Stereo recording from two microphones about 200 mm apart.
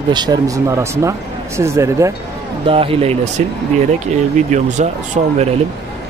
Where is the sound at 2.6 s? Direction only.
25° right (ahead or behind).